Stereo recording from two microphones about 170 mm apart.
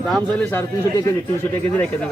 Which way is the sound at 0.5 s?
20° left (ahead or behind).